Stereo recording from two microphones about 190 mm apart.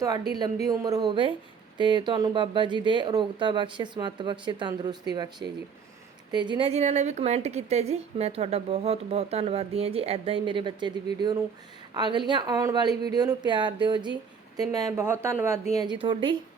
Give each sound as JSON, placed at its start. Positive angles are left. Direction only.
{"t": 0.3, "sound": "a woman's voice", "side_deg": -20}